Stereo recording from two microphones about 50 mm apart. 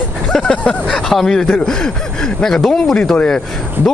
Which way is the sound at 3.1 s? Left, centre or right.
Left.